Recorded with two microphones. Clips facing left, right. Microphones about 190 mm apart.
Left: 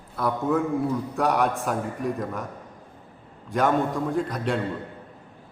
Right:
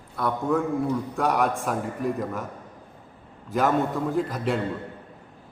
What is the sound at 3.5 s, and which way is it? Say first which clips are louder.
A man's voice: even; centre (ahead or behind).